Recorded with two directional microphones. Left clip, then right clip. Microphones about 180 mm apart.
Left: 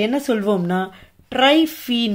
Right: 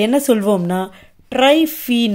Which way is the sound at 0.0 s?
30° right (ahead or behind).